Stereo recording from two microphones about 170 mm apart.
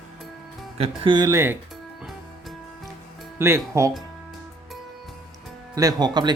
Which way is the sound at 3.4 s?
15° right (ahead or behind).